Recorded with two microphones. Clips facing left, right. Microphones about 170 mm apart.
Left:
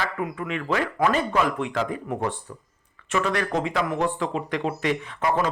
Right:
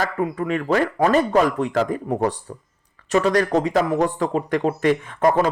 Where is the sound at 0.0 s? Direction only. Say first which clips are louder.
Right 6 dB; 40° right (ahead or behind).